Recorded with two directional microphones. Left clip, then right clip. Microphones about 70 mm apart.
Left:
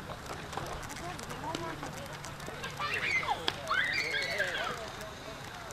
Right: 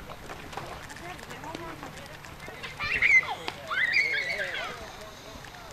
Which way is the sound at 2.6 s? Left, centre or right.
Right.